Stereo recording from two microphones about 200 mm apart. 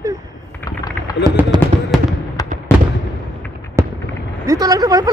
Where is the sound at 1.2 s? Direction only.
20° right (ahead or behind).